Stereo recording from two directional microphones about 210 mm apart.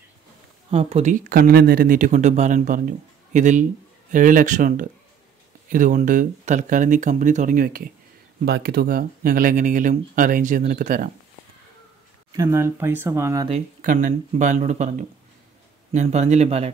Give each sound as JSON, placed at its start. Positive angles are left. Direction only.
{"t": 0.7, "sound": "speech", "side_deg": -30}
{"t": 12.3, "sound": "speech", "side_deg": -15}
{"t": 13.7, "sound": "speech", "side_deg": -40}